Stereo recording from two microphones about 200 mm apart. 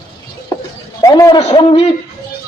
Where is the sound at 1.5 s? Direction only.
30° left (ahead or behind).